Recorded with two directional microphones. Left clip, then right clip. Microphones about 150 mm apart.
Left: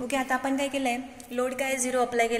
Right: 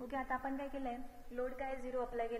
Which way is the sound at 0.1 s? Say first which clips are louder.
Left 13 dB; centre (ahead or behind).